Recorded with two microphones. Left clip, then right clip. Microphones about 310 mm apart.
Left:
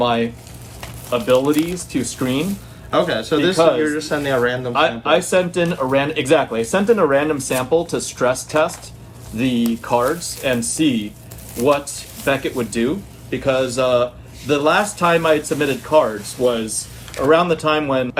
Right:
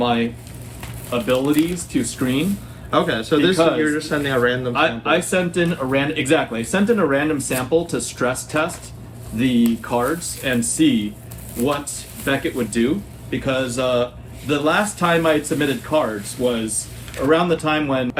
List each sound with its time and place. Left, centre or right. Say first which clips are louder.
0.0 s speech: left 2 dB; centre
2.9 s speech: left 1 dB; centre
4.7 s speech: left 2 dB; centre
12.2 s speech: left 2 dB; centre